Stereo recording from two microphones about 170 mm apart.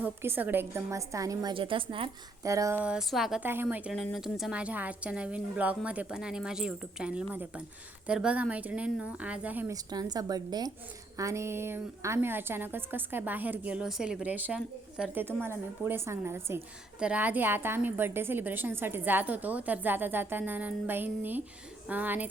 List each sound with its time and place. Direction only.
0.0 s a woman's voice: 10° right (ahead or behind); by 2.0 s 30° right (ahead or behind)
2.4 s a woman's voice: 20° right (ahead or behind)
2.8 s a woman's voice: 5° right (ahead or behind)
9.7 s a woman's voice: 20° right (ahead or behind)